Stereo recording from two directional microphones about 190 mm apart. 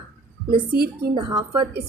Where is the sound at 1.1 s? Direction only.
20° right (ahead or behind).